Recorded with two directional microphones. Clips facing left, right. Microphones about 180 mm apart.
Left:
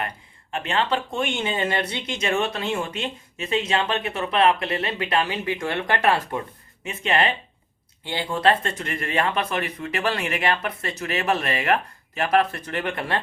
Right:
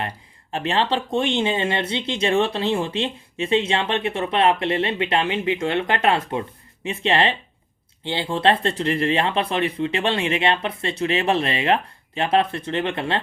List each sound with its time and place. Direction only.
0.5 s speech: 35° right (ahead or behind)